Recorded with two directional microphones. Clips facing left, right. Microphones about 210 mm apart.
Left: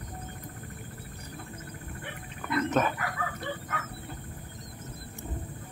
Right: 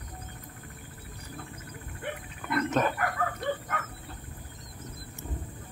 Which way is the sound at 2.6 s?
Centre (ahead or behind).